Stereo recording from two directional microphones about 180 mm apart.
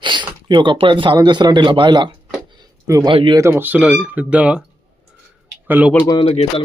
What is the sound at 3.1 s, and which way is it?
Speech, 25° right (ahead or behind).